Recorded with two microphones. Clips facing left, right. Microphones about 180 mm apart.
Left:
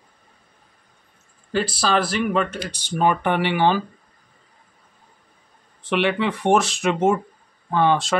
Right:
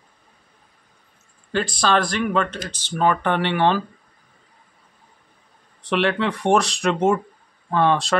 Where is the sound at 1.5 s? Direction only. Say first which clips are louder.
Right 1 dB; 5° left (ahead or behind).